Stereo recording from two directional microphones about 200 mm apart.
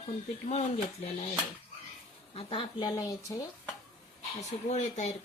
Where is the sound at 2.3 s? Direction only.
25° left (ahead or behind).